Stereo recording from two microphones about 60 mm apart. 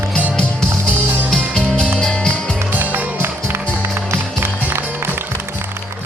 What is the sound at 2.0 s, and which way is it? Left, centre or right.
Music, centre.